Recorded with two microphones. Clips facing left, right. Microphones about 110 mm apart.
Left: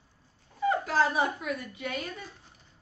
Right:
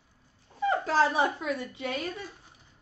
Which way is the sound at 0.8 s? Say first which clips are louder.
Right 2 dB; 30° right (ahead or behind).